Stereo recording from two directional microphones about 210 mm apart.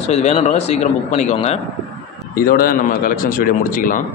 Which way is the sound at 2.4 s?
45° left (ahead or behind).